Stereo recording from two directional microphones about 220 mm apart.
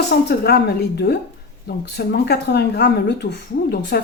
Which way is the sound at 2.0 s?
45° left (ahead or behind).